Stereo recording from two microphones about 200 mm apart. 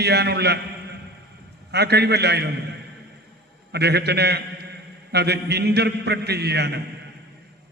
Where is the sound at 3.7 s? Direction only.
55° right (ahead or behind).